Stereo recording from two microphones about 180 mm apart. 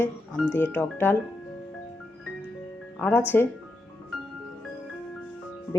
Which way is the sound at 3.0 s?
10° left (ahead or behind).